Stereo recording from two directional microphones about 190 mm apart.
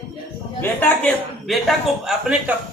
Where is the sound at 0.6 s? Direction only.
10° left (ahead or behind).